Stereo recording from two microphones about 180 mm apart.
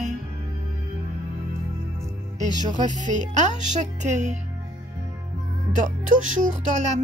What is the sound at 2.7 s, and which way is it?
Speech, 45° right (ahead or behind).